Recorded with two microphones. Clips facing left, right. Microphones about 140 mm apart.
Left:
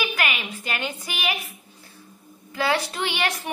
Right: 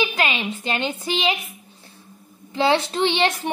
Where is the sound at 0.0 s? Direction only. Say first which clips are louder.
Right 4 dB; 25° right (ahead or behind).